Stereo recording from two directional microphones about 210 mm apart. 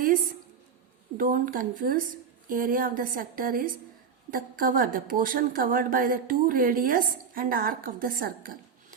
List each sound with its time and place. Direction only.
1.1 s a woman's voice: 40° right (ahead or behind)